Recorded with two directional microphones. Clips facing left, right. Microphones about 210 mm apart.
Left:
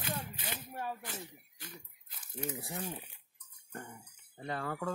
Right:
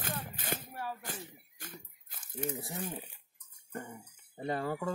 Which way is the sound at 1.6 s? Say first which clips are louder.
Right 2 dB; 50° right (ahead or behind).